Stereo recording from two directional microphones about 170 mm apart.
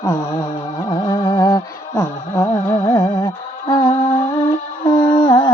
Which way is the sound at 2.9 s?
25° left (ahead or behind).